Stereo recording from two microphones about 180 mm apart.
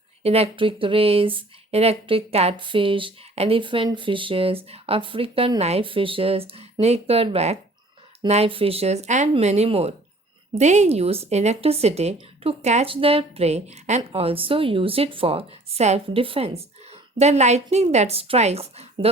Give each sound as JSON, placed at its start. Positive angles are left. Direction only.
{"t": 0.2, "sound": "speech", "side_deg": -35}